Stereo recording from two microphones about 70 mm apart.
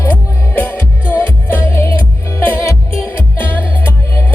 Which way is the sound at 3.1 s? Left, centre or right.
Left.